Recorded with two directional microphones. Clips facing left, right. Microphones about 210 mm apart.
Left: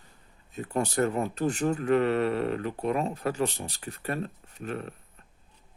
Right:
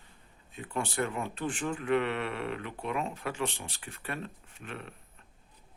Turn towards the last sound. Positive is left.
turn(degrees=40)  # may be behind; listen again after turning